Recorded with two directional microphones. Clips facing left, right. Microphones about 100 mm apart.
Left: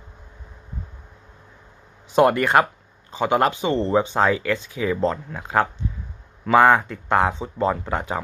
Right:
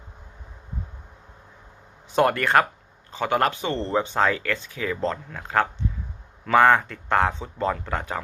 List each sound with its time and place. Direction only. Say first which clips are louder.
2.1 s speech: left 3 dB; 15° left (ahead or behind)